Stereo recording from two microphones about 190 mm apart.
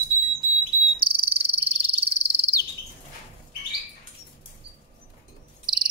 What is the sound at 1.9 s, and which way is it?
Frog, 30° right (ahead or behind).